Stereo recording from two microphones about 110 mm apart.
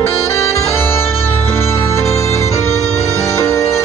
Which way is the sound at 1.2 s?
20° left (ahead or behind).